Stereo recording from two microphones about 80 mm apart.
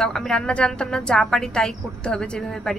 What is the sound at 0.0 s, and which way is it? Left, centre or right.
A woman's voice, centre.